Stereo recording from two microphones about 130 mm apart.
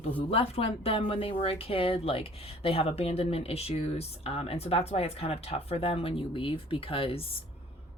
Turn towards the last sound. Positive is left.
turn(degrees=45)  # may be behind; listen again after turning